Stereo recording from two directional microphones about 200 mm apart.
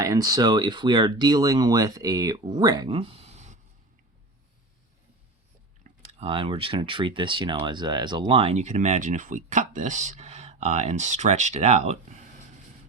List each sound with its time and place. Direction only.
0.0 s speech: 15° right (ahead or behind); by 3.6 s 35° right (ahead or behind)
6.0 s speech: 30° right (ahead or behind)